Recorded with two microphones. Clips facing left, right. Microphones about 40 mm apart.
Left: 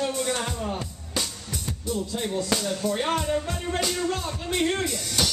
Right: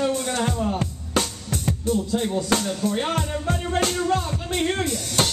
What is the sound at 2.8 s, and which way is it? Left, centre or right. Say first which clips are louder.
Speech: right 1 dB; centre.